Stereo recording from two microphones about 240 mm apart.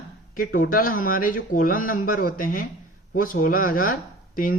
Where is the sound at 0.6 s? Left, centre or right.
Left.